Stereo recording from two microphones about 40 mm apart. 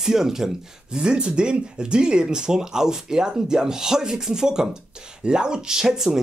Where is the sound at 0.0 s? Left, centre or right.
Centre.